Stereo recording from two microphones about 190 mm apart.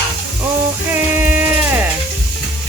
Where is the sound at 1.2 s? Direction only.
10° right (ahead or behind).